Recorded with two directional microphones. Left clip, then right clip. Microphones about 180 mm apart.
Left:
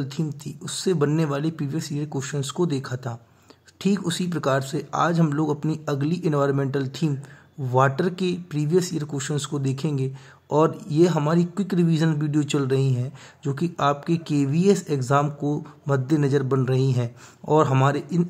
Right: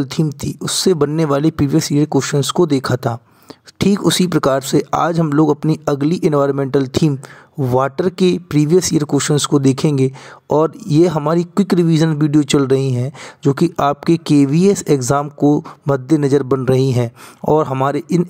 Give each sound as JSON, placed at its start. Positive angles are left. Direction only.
{"t": 0.0, "sound": "speech", "side_deg": -45}